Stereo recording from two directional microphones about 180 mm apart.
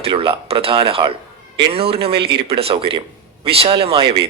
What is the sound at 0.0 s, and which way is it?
A man's voice, 30° right (ahead or behind).